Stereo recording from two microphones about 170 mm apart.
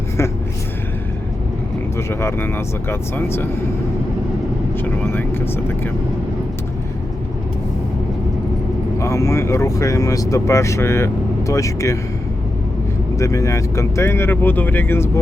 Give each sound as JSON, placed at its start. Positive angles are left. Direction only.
{"t": 2.0, "sound": "speech", "side_deg": 15}
{"t": 4.8, "sound": "speech", "side_deg": 15}
{"t": 9.0, "sound": "speech", "side_deg": 15}
{"t": 13.1, "sound": "speech", "side_deg": 20}